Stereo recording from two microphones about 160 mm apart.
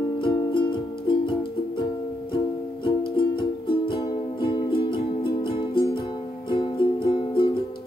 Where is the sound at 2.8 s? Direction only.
30° left (ahead or behind).